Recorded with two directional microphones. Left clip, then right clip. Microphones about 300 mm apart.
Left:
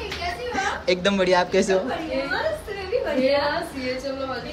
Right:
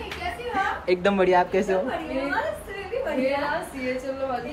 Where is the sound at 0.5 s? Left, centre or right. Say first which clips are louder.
Even; centre.